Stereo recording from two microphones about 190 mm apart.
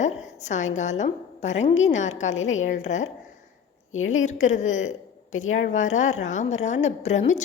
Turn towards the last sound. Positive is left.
turn(degrees=35)  # may be behind; listen again after turning